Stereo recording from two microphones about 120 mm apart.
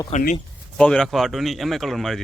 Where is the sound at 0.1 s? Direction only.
65° left (ahead or behind).